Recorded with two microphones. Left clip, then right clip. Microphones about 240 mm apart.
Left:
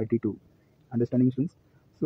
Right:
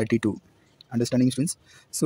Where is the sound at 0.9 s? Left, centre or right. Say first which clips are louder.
Right 2 dB; right.